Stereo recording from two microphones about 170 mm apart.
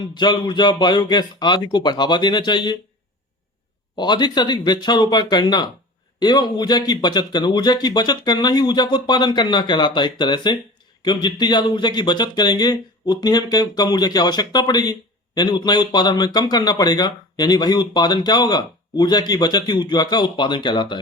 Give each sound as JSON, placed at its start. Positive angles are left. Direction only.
{"t": 0.1, "sound": "speech", "side_deg": 25}
{"t": 3.9, "sound": "speech", "side_deg": 25}